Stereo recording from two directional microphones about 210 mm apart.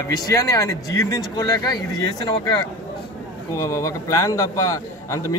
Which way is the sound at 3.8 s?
15° left (ahead or behind).